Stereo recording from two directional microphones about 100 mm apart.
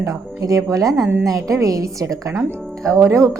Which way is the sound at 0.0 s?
35° right (ahead or behind).